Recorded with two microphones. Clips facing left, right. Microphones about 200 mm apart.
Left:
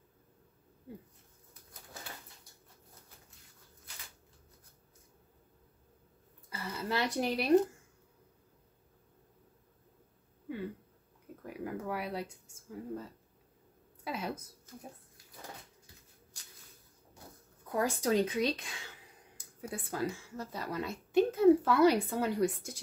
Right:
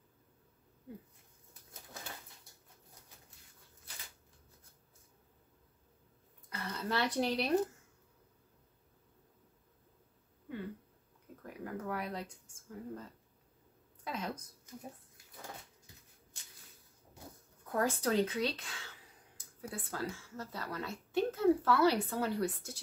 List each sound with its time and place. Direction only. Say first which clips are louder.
6.5 s speech: left 1 dB; 10° left (ahead or behind)
11.6 s a sound: left 2 dB; 10° left (ahead or behind)
14.0 s a woman's voice: left 2 dB; 10° left (ahead or behind)
17.6 s a woman's voice: left 2 dB; 10° left (ahead or behind)